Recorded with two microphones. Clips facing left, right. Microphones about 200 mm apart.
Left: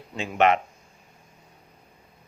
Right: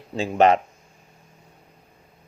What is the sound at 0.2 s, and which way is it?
Speech, 35° right (ahead or behind).